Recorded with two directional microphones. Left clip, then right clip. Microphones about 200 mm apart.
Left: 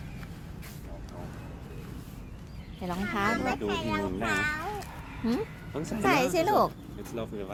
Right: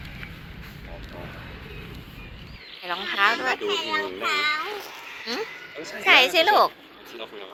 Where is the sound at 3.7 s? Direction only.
15° left (ahead or behind).